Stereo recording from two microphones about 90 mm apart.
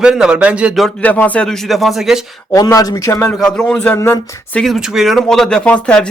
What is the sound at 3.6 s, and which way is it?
Speech, 20° left (ahead or behind).